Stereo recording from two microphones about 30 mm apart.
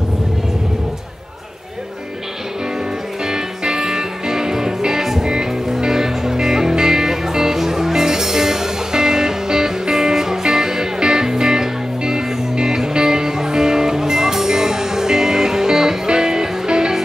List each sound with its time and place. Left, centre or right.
3.3 s music: right